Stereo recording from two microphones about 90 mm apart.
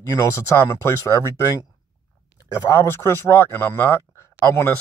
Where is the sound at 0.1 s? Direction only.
35° left (ahead or behind).